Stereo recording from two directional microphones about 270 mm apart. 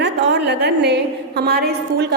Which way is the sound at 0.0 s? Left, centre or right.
Right.